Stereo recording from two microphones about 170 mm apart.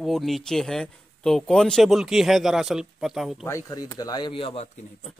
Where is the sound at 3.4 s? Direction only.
20° left (ahead or behind).